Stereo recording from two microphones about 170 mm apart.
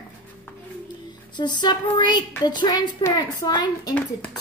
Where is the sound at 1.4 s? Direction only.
25° left (ahead or behind).